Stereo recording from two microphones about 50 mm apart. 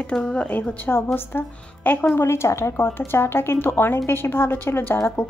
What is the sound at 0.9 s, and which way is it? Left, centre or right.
A woman's voice, left.